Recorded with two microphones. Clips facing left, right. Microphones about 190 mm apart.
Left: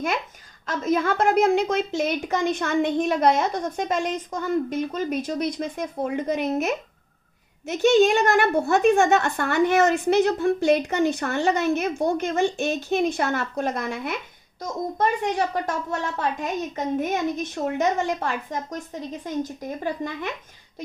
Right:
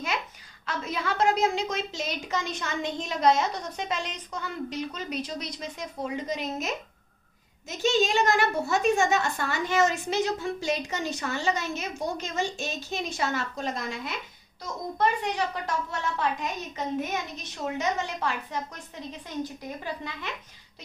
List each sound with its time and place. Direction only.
0.7 s a woman's voice: 45° left (ahead or behind)
19.8 s speech: 50° left (ahead or behind)